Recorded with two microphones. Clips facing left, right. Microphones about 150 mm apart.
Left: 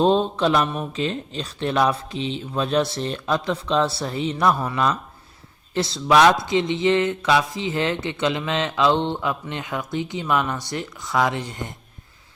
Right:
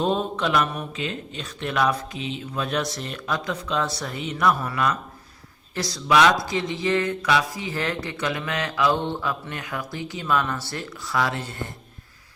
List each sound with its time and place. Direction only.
0.0 s speech: 30° left (ahead or behind)